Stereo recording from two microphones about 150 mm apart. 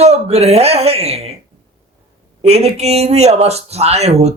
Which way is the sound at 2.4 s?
45° right (ahead or behind).